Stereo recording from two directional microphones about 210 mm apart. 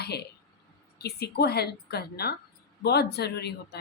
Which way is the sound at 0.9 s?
50° left (ahead or behind).